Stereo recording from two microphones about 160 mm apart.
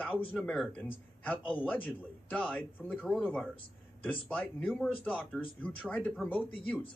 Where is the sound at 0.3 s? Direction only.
5° left (ahead or behind).